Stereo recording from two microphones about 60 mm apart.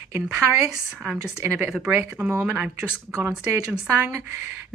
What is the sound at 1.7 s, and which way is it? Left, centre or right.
Speech, centre.